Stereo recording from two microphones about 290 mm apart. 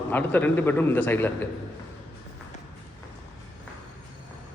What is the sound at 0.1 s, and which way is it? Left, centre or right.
A man's voice, centre.